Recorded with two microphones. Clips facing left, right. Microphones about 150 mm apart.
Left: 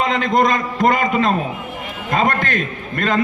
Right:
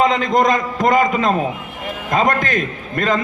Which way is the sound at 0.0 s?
45° right (ahead or behind).